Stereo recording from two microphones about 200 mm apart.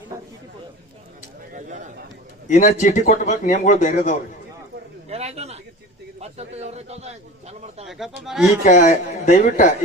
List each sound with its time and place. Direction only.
1.5 s a sound: 40° right (ahead or behind)
2.5 s a man's voice: 40° left (ahead or behind)
5.0 s a sound: 30° right (ahead or behind)
6.1 s a man's voice: 30° right (ahead or behind)
7.9 s speech: centre (ahead or behind)
8.6 s a man's voice: 40° left (ahead or behind)